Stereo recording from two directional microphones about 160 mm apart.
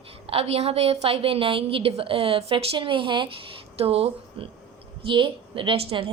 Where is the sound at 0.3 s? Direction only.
40° right (ahead or behind).